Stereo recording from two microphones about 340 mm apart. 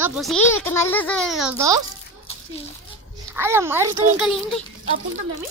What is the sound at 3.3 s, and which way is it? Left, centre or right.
A child's voice, centre.